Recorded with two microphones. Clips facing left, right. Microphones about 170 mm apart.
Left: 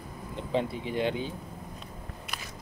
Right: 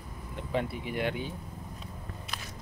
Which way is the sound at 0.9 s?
25° left (ahead or behind).